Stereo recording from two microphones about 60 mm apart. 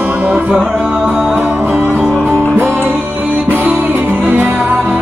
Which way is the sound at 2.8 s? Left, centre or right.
Right.